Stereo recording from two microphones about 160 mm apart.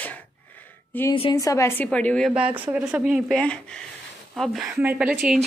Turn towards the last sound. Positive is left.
turn(degrees=-5)  # may be behind; listen again after turning